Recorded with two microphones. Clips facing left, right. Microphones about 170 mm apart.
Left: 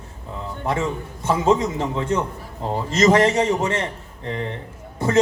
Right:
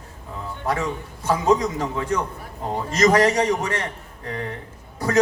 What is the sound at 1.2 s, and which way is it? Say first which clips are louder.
A man's voice: left 1 dB; 25° left (ahead or behind).